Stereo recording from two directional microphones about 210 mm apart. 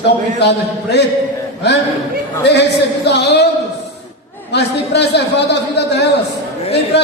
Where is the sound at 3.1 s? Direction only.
55° left (ahead or behind).